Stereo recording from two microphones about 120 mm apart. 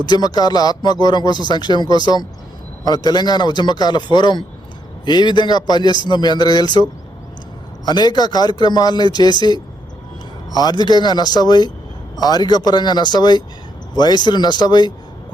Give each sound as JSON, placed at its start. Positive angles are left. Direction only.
{"t": 0.0, "sound": "speech", "side_deg": 35}
{"t": 7.9, "sound": "a man's voice", "side_deg": 35}